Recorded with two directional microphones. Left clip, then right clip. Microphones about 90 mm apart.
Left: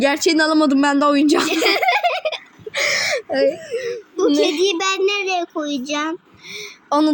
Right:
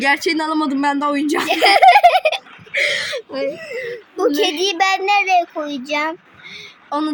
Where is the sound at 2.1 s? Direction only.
55° right (ahead or behind).